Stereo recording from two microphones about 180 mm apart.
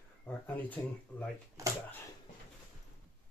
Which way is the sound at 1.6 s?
20° right (ahead or behind).